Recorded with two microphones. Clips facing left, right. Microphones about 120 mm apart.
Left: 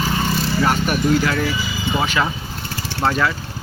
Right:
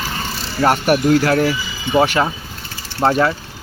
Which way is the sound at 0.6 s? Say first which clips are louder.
Right 7 dB; 65° right (ahead or behind).